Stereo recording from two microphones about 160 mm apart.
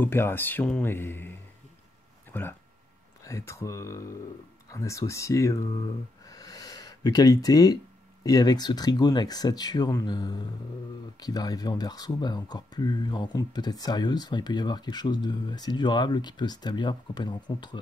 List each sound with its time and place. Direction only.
0.0 s speech: 15° left (ahead or behind)